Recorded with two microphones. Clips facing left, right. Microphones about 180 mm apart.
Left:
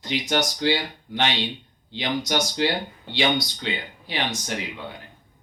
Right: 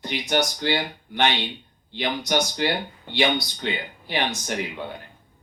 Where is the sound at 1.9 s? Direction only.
55° right (ahead or behind).